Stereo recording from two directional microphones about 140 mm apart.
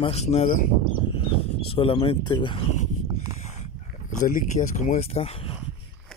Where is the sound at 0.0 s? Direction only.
50° left (ahead or behind).